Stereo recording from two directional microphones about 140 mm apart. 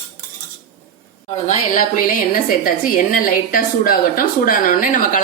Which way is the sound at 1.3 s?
60° left (ahead or behind).